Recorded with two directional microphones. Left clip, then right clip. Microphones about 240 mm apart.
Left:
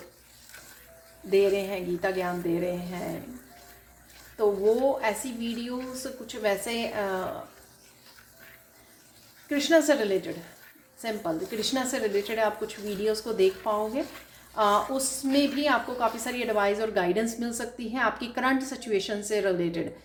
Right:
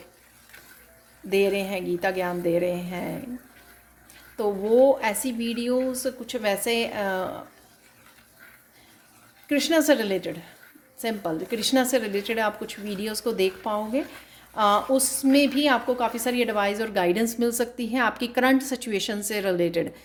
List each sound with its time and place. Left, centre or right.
1.3 s a woman's voice: right
4.4 s a woman's voice: right
9.5 s a woman's voice: right